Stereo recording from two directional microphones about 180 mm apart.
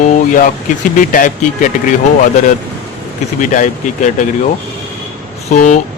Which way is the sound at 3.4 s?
45° left (ahead or behind).